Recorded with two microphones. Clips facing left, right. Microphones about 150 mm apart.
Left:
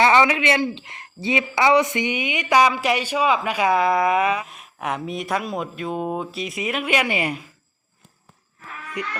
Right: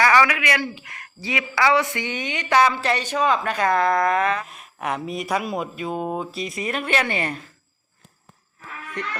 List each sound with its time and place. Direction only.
0.0 s speech: 25° left (ahead or behind)